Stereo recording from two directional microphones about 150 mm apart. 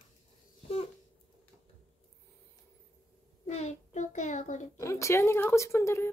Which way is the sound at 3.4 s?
45° left (ahead or behind).